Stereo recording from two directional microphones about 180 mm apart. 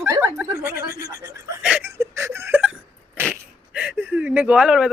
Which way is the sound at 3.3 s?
5° right (ahead or behind).